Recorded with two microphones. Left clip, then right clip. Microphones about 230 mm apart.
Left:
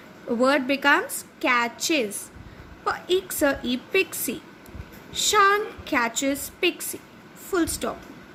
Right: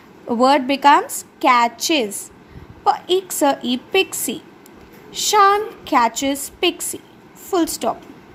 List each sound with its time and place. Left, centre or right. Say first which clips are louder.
0.3 s a woman's voice: right 6 dB; centre